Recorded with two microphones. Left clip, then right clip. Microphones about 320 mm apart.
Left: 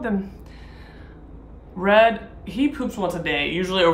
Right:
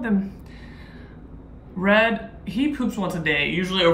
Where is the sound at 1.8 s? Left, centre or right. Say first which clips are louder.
Left 3 dB; centre.